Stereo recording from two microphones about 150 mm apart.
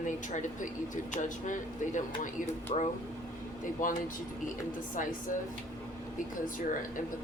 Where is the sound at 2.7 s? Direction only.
45° left (ahead or behind).